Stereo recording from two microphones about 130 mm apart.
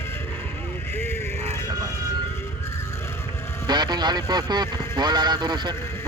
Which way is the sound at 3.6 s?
35° right (ahead or behind).